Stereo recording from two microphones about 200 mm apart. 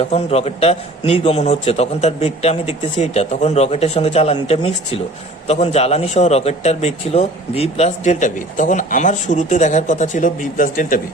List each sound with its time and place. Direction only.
0.0 s a man's voice: 30° left (ahead or behind)